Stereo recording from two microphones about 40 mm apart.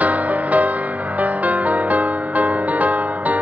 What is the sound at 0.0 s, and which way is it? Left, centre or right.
Music, right.